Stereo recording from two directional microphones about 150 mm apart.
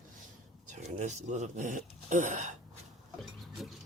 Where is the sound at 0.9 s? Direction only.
50° right (ahead or behind).